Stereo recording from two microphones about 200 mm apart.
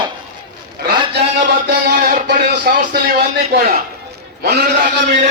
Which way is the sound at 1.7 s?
50° right (ahead or behind).